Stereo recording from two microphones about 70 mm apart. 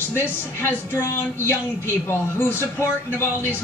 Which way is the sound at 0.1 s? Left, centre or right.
Left.